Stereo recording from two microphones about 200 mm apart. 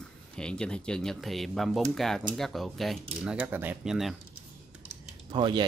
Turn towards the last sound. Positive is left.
turn(degrees=-25)  # may be behind; listen again after turning